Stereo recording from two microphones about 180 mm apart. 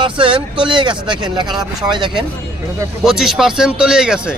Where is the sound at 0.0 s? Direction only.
30° right (ahead or behind).